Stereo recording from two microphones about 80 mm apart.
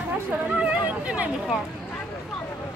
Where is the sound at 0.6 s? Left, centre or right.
Centre.